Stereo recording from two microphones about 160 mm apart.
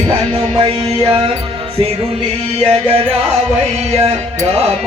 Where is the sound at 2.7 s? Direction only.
40° right (ahead or behind).